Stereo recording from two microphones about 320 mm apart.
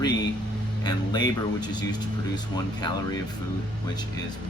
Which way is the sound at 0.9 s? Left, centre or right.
Centre.